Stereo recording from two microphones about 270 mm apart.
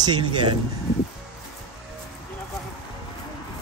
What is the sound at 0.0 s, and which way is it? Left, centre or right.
Speech, centre.